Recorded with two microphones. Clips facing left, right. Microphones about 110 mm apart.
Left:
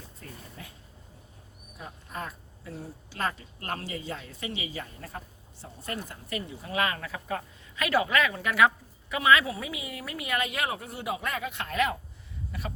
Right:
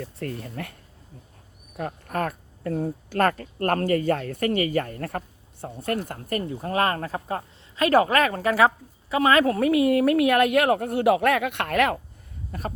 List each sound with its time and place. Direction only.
0.0 s speech: 75° right (ahead or behind)
12.5 s speech: 45° right (ahead or behind)